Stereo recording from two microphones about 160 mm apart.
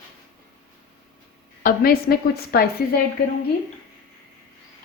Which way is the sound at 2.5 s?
75° left (ahead or behind).